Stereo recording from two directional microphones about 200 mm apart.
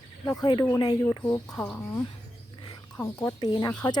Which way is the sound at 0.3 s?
20° left (ahead or behind).